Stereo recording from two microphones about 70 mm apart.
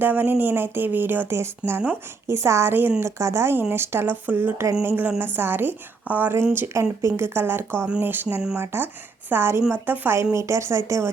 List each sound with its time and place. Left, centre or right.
0.0 s a woman's voice: right
10.3 s speech: right